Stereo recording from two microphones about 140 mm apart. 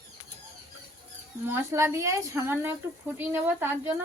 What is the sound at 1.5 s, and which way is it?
A woman's voice, 20° right (ahead or behind).